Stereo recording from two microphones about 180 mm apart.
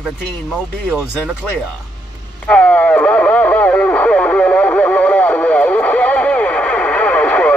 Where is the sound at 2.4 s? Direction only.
5° left (ahead or behind).